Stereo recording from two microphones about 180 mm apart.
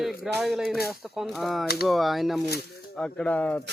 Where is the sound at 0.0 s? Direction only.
Centre (ahead or behind).